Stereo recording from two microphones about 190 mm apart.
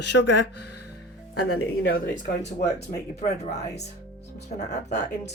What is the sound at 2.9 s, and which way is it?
Speech, 50° left (ahead or behind).